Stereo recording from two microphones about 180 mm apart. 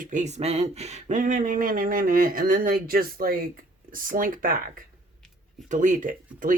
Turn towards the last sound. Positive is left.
turn(degrees=-45)  # may be behind; listen again after turning